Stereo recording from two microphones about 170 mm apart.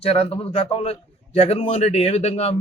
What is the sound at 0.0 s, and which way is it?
Speech, 35° left (ahead or behind).